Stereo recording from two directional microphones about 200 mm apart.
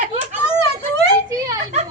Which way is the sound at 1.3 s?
15° right (ahead or behind).